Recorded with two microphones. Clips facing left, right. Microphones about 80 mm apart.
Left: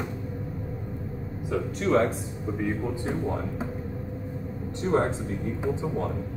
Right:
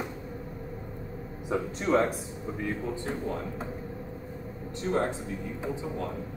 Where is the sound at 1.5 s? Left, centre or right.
Right.